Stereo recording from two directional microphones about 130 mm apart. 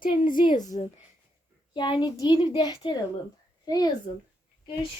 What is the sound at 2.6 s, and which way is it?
A woman's voice, 35° left (ahead or behind).